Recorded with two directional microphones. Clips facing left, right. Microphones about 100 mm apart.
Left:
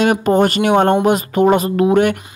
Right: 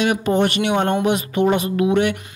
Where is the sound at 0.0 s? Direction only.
40° left (ahead or behind).